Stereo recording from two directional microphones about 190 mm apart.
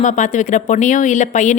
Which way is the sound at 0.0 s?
40° left (ahead or behind).